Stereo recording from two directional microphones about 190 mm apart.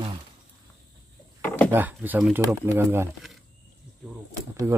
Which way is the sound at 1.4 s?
10° left (ahead or behind).